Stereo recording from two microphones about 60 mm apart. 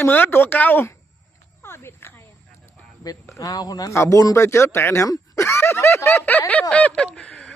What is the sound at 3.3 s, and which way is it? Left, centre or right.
Speech, left.